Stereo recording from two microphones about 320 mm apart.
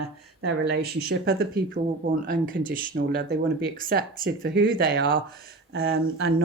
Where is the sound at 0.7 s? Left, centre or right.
Right.